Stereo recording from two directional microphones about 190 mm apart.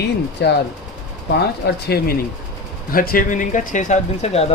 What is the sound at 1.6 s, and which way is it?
Speech, 55° left (ahead or behind).